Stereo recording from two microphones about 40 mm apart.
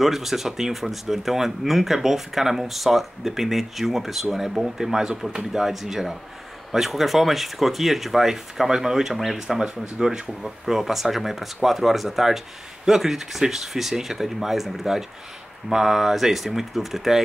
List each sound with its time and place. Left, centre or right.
0.0 s speech: centre
9.1 s speech: centre